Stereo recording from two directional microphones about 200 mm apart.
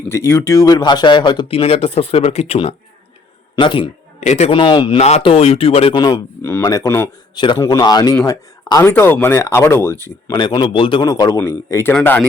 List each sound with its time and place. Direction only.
0.1 s a man's voice: 15° left (ahead or behind)
4.2 s speech: 35° left (ahead or behind); by 7.1 s 10° left (ahead or behind)
7.3 s speech: 20° left (ahead or behind)
10.3 s speech: 25° left (ahead or behind)